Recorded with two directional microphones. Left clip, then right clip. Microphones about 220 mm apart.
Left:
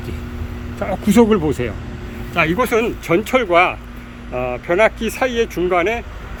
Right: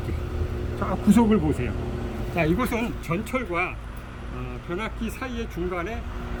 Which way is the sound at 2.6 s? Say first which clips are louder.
Left 11 dB; centre (ahead or behind).